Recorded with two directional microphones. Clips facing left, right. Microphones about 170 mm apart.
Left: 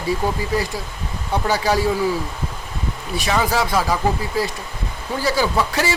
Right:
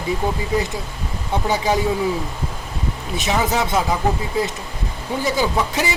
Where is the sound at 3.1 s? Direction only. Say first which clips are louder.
Left 1 dB; 20° right (ahead or behind).